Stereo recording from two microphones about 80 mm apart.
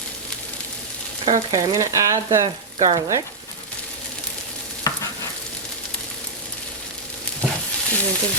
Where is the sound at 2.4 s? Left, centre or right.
Right.